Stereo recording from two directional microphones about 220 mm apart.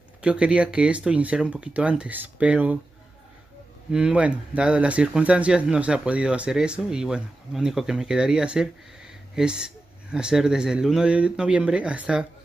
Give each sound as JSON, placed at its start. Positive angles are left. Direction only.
{"t": 0.2, "sound": "speech", "side_deg": -5}
{"t": 3.9, "sound": "speech", "side_deg": -5}